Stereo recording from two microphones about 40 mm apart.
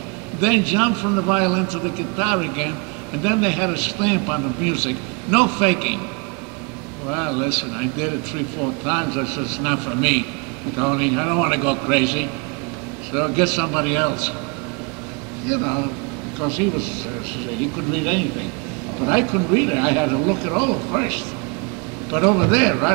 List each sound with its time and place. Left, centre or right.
0.4 s a man's voice: centre
7.1 s a man's voice: centre
15.4 s a man's voice: centre